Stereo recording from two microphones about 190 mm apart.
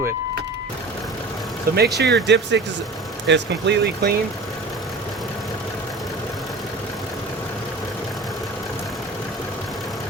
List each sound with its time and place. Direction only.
1.7 s speech: 60° right (ahead or behind)